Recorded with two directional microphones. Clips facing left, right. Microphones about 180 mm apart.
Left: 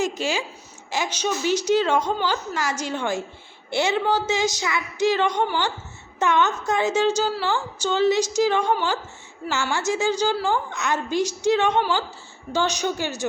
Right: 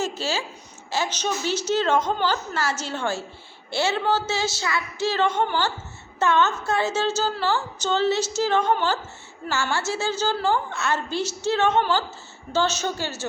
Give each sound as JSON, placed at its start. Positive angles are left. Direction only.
{"t": 0.0, "sound": "a woman's voice", "side_deg": 15}